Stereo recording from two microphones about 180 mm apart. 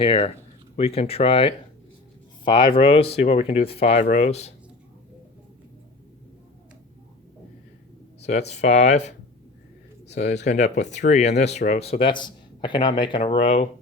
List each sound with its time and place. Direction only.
0.0 s speech: 30° left (ahead or behind)
8.2 s speech: 35° left (ahead or behind)
10.4 s speech: 40° left (ahead or behind)